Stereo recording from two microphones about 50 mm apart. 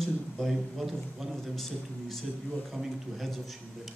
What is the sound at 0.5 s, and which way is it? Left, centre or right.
A man's voice, centre.